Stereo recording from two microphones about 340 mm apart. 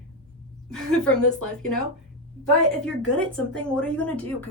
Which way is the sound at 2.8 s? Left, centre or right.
Centre.